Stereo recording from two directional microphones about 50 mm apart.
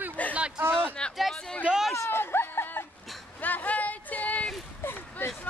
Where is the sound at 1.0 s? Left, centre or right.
Centre.